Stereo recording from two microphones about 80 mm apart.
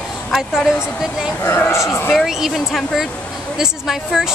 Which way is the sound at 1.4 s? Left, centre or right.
Left.